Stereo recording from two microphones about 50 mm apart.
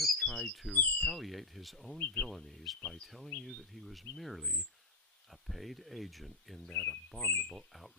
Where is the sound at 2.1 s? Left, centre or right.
Centre.